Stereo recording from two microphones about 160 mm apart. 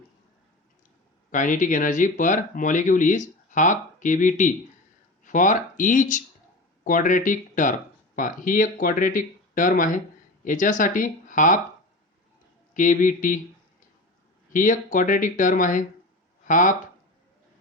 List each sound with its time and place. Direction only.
1.3 s speech: 55° left (ahead or behind)
12.7 s speech: 55° left (ahead or behind)
14.5 s speech: 55° left (ahead or behind)